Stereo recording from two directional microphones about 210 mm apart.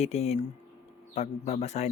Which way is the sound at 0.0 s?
30° left (ahead or behind).